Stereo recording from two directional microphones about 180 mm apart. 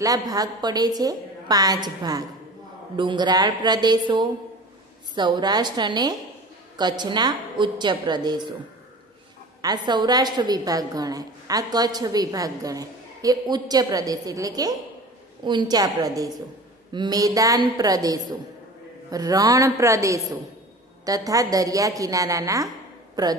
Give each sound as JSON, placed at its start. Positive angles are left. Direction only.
{"t": 0.0, "sound": "a woman's voice", "side_deg": -20}
{"t": 9.6, "sound": "a woman's voice", "side_deg": -25}